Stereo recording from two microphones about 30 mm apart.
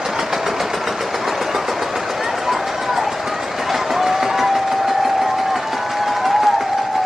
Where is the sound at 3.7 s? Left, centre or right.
Centre.